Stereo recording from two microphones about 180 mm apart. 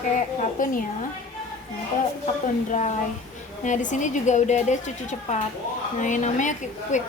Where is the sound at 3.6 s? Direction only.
45° left (ahead or behind).